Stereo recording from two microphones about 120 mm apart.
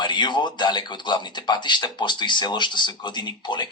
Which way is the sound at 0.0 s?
40° left (ahead or behind).